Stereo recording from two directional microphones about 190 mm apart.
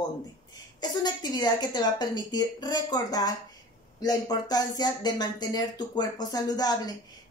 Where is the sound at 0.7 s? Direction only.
20° left (ahead or behind).